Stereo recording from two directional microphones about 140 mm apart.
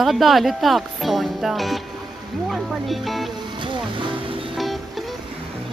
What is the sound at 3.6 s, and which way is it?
Music, 35° right (ahead or behind).